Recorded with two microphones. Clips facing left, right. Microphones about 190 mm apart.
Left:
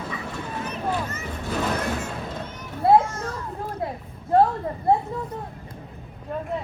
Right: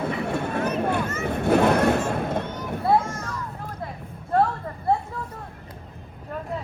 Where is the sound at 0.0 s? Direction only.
60° right (ahead or behind).